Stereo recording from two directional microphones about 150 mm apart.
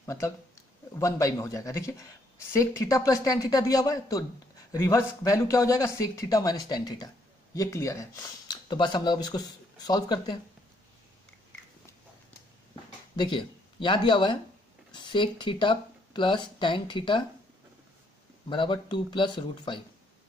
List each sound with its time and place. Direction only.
0.0 s speech: 20° left (ahead or behind)
13.1 s speech: 30° left (ahead or behind)
18.5 s speech: 35° left (ahead or behind)